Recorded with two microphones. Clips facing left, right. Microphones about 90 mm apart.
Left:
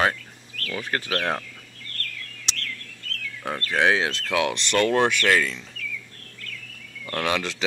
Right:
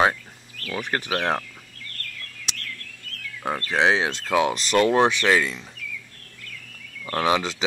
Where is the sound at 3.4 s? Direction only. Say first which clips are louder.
Right 1 dB; 15° right (ahead or behind).